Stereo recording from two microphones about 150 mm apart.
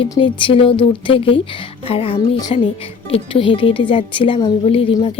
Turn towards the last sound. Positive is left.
turn(degrees=35)  # may be behind; listen again after turning